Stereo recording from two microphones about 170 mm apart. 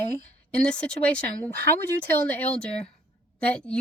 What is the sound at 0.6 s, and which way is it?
Speech, 5° left (ahead or behind).